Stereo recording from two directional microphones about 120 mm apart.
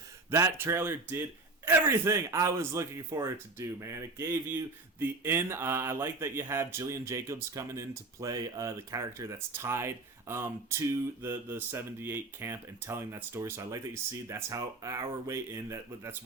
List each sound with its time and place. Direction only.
0.3 s a man's voice: 20° right (ahead or behind)